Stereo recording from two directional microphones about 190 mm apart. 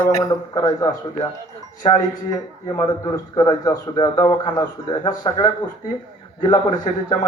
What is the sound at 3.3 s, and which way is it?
A man's voice, 20° left (ahead or behind).